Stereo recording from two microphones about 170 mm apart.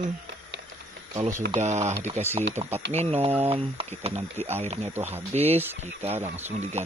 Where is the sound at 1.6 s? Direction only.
40° right (ahead or behind).